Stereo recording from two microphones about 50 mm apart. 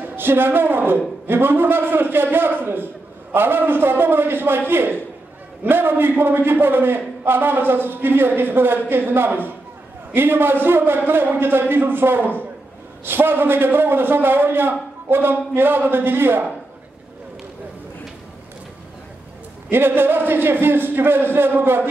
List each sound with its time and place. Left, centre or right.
0.1 s a man's voice: right
19.7 s a man's voice: right